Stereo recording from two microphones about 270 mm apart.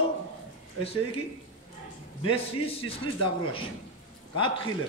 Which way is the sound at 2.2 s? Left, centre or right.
Left.